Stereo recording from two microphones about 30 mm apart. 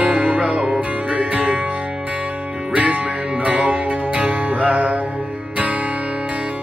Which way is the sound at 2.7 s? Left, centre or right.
Right.